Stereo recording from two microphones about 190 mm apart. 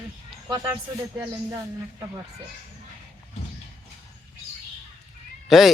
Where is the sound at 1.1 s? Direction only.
15° right (ahead or behind).